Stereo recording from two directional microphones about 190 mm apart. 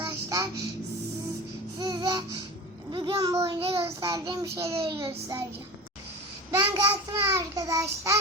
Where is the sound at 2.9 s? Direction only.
25° right (ahead or behind).